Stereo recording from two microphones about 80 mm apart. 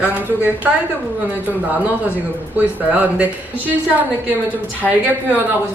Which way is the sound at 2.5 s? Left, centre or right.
Right.